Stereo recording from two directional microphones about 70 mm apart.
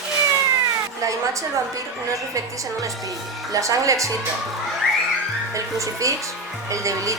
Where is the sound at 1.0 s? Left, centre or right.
Right.